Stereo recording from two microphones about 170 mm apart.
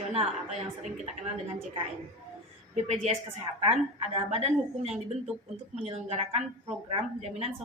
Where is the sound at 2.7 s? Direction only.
40° right (ahead or behind).